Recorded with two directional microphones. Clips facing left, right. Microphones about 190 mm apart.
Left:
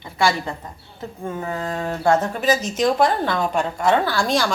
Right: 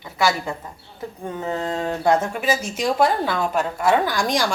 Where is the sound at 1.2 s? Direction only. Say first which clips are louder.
Right 1 dB; 20° right (ahead or behind).